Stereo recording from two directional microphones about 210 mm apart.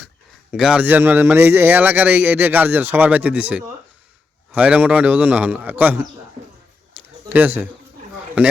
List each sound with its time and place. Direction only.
0.5 s a man's voice: 5° right (ahead or behind)
7.3 s speech: 10° right (ahead or behind)